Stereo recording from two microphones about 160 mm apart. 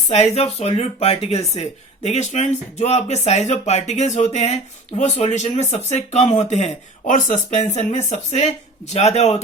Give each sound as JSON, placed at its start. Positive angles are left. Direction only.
{"t": 0.1, "sound": "speech", "side_deg": 40}